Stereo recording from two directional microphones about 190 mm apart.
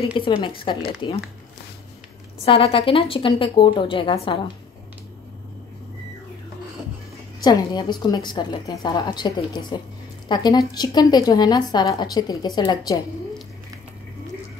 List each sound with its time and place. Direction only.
0.2 s a woman's voice: 25° left (ahead or behind)
2.4 s a woman's voice: 30° left (ahead or behind)
7.4 s a woman's voice: 20° left (ahead or behind)